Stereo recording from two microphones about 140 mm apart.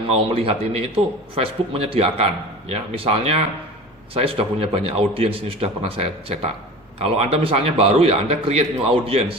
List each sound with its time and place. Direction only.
0.1 s a man's voice: 45° right (ahead or behind)